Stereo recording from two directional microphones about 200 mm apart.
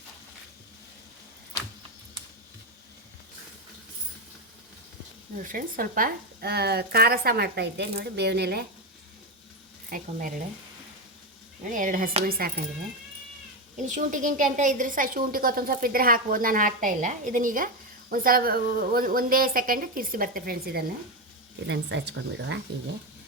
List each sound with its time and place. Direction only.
5.4 s speech: 45° right (ahead or behind)
9.9 s speech: 40° right (ahead or behind)
11.6 s a woman's voice: 40° right (ahead or behind)
13.7 s a woman's voice: 40° right (ahead or behind)
21.7 s speech: 60° right (ahead or behind)